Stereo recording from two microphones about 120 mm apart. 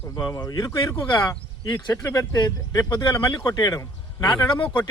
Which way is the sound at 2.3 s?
30° left (ahead or behind).